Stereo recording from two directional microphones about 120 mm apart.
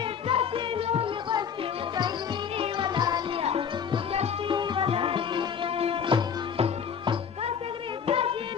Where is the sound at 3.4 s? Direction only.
50° right (ahead or behind).